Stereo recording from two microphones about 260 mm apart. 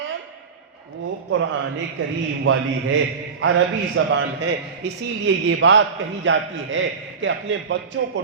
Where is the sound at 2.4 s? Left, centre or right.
Right.